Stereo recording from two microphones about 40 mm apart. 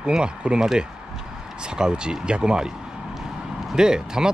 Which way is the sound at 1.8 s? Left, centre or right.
Right.